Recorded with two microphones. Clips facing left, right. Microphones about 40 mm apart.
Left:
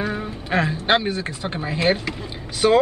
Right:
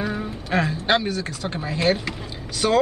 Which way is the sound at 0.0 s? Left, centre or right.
Centre.